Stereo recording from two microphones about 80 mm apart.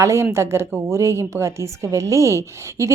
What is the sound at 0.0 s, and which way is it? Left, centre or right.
A woman's voice, right.